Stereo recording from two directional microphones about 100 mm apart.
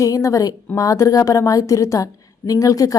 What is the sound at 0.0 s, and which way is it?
A woman's voice, 35° left (ahead or behind).